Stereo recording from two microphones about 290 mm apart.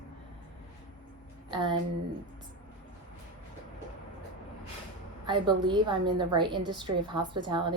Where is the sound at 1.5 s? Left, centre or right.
Centre.